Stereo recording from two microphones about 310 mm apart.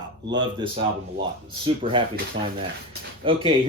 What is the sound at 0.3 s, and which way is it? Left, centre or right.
Speech, centre.